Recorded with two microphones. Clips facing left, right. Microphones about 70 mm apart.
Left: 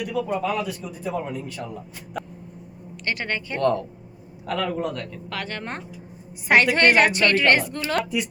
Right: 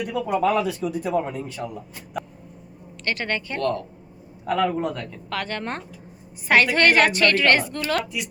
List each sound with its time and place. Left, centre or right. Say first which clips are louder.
0.3 s a man's voice: right 4 dB; right
1.1 s a man's voice: right 4 dB; right
2.2 s a sound: right 2 dB; centre
3.0 s a woman's voice: right 1 dB; centre
4.4 s a man's voice: right 3 dB; centre
5.3 s speech: right 4 dB; centre
6.5 s a woman's voice: even; left